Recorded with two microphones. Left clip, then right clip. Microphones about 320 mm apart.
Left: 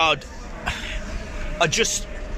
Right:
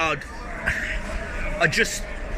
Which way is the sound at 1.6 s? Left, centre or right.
Centre.